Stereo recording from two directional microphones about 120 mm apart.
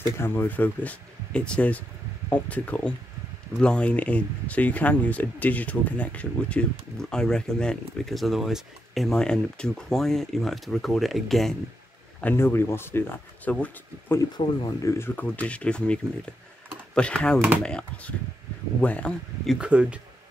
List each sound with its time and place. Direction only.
0.2 s speech: 20° left (ahead or behind); by 11.5 s centre (ahead or behind)
12.2 s speech: 15° left (ahead or behind)
14.3 s speech: 35° left (ahead or behind); by 19.5 s 10° left (ahead or behind)
19.5 s speech: 10° right (ahead or behind)